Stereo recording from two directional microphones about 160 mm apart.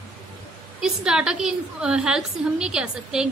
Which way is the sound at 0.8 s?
5° right (ahead or behind).